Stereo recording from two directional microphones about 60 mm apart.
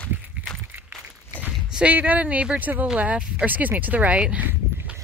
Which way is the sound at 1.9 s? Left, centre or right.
Right.